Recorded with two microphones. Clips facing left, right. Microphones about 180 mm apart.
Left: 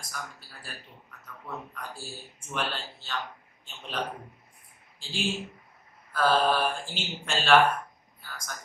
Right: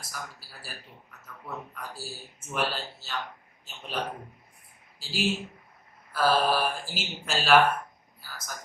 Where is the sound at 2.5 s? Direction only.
5° right (ahead or behind).